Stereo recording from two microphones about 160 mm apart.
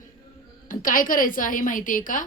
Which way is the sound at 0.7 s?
60° left (ahead or behind).